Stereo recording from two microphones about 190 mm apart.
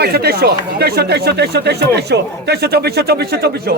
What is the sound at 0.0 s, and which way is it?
Speech, 55° right (ahead or behind).